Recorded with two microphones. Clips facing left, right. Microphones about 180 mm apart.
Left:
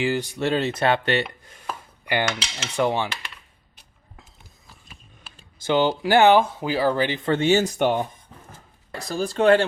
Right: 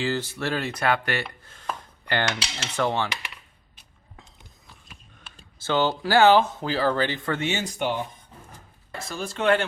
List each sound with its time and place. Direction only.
0.0 s chopping: 15° left (ahead or behind)
4.2 s a sound: centre (ahead or behind)
5.5 s speech: 15° left (ahead or behind)
7.3 s speech: 35° left (ahead or behind)